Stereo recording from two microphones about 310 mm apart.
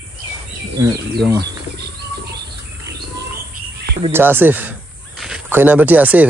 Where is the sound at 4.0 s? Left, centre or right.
Centre.